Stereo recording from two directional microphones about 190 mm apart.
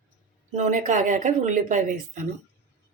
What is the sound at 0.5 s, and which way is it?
Speech, 40° right (ahead or behind).